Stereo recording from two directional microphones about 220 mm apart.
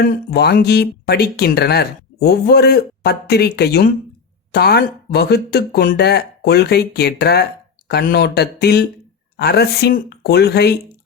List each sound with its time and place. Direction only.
0.0 s speech: 45° left (ahead or behind)